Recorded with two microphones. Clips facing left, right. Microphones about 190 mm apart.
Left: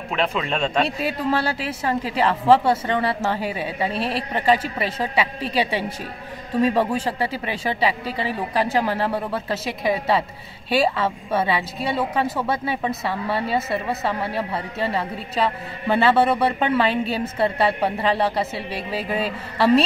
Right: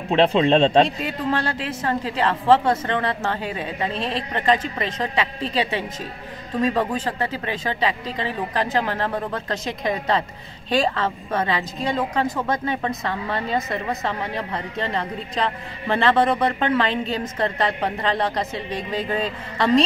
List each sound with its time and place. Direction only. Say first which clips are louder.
0.1 s a man's voice: right 8 dB; 30° right (ahead or behind)
0.8 s a woman's voice: left 2 dB; 10° left (ahead or behind)